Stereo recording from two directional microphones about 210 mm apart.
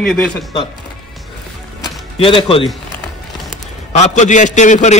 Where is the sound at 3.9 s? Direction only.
35° left (ahead or behind).